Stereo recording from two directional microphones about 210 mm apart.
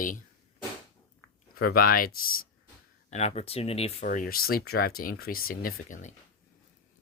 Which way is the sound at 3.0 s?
30° left (ahead or behind).